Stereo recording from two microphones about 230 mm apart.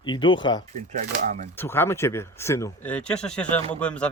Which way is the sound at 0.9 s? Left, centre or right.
Right.